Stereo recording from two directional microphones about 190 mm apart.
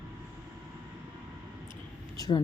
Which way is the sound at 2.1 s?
20° left (ahead or behind).